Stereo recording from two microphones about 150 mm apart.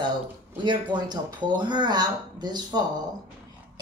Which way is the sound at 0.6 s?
30° right (ahead or behind).